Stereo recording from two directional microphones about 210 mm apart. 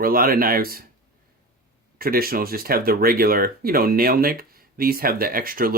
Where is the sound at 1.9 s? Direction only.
45° right (ahead or behind).